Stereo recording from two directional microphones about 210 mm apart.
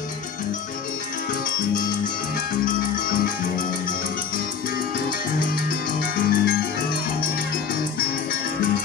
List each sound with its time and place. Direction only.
5.7 s music: 45° left (ahead or behind)